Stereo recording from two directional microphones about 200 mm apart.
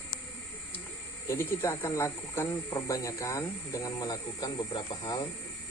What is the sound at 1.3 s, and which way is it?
Speech, 10° left (ahead or behind).